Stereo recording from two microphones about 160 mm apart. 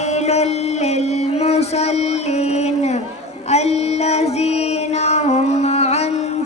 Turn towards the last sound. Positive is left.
turn(degrees=40)  # may be behind; listen again after turning